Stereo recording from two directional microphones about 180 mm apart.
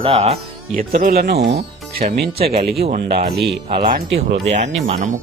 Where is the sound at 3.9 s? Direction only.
60° right (ahead or behind).